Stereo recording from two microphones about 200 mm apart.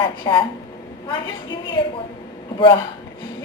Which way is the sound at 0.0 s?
25° left (ahead or behind).